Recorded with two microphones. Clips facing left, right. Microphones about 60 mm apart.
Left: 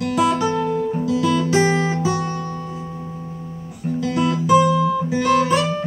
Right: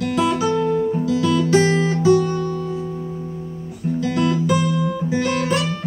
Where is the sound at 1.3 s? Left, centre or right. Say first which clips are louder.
Right 3 dB; centre; by 2.7 s left.